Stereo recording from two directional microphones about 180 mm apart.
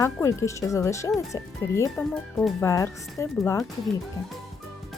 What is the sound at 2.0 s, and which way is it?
Speech, centre (ahead or behind).